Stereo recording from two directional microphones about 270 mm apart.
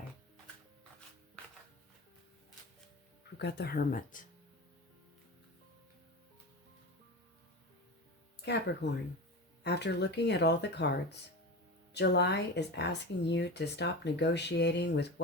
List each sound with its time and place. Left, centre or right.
3.3 s speech: left
8.4 s speech: left